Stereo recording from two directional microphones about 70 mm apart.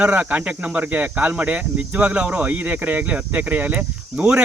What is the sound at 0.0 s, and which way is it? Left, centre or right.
Speech, right.